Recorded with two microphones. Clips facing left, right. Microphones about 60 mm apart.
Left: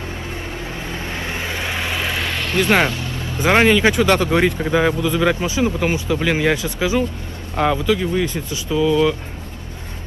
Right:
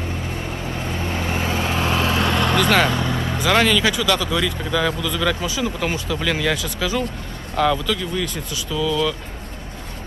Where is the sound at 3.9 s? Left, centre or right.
Left.